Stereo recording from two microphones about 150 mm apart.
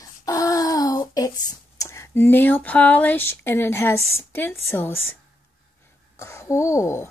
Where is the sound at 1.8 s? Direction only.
20° left (ahead or behind).